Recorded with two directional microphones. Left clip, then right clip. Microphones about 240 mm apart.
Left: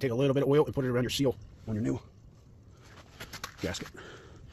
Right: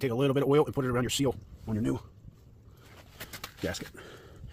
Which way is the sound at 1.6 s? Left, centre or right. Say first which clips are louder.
Right 1 dB; centre.